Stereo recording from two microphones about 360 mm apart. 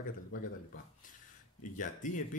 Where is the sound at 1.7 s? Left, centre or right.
Left.